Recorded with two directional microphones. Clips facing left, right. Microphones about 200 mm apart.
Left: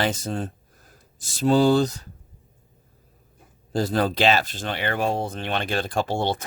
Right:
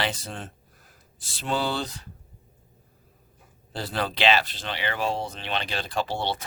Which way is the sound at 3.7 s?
45° left (ahead or behind).